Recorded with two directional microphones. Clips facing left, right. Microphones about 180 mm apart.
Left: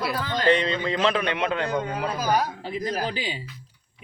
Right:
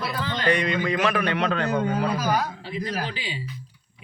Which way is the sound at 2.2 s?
35° left (ahead or behind).